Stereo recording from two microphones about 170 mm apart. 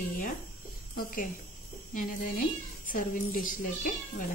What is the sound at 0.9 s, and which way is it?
A woman's voice, 55° left (ahead or behind).